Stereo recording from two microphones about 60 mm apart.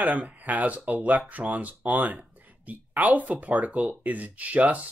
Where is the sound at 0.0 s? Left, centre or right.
Right.